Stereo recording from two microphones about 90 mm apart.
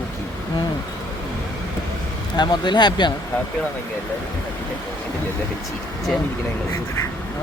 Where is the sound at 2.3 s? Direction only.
55° left (ahead or behind).